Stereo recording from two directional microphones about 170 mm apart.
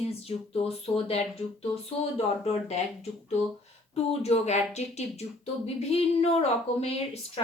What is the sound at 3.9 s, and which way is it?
Speech, 40° left (ahead or behind).